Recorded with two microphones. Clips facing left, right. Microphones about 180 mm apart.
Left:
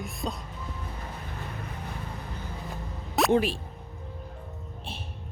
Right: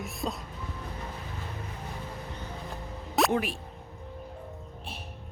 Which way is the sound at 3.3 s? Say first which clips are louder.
Left 5 dB; 30° left (ahead or behind).